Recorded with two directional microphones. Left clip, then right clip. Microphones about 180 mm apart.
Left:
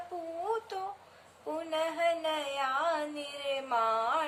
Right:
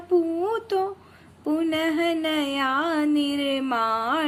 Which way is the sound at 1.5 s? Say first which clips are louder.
Right 8 dB; 45° right (ahead or behind).